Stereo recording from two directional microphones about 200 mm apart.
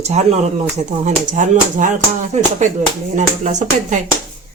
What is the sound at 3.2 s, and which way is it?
Speech, 35° right (ahead or behind).